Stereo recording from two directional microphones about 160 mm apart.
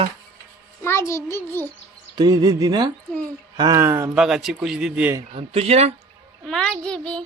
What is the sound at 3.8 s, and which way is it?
Speech, 15° right (ahead or behind).